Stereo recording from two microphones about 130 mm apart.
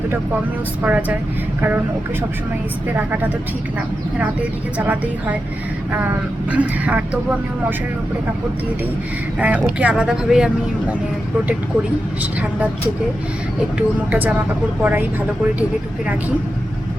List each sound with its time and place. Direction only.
0.8 s speech: 10° right (ahead or behind)
2.9 s speech: 15° right (ahead or behind)
4.8 s speech: 10° right (ahead or behind)
9.4 s speech: 10° right (ahead or behind)
12.2 s speech: 10° right (ahead or behind)
13.7 s speech: 10° right (ahead or behind)